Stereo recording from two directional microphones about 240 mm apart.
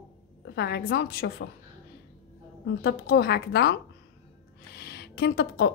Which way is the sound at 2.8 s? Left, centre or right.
Left.